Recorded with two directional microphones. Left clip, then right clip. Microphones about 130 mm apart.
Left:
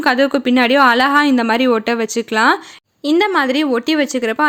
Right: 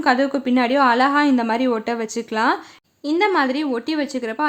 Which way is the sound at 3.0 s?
35° left (ahead or behind).